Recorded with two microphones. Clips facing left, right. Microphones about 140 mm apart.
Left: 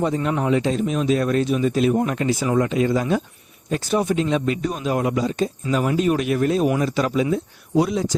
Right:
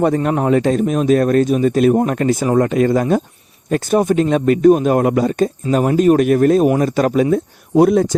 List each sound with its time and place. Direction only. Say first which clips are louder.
0.0 s speech: right 6 dB; 55° right (ahead or behind)
5.6 s speech: right 7 dB; 45° right (ahead or behind)